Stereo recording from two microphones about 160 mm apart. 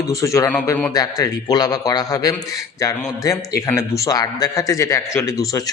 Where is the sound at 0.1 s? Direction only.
20° left (ahead or behind).